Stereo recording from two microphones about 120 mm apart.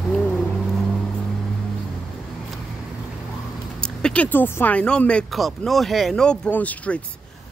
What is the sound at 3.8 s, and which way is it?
Speech, 10° left (ahead or behind).